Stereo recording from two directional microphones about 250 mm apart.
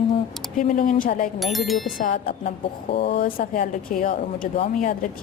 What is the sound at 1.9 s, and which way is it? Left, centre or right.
A woman's voice, left.